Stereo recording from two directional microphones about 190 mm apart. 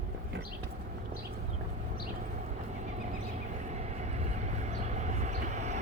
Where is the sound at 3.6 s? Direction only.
35° right (ahead or behind).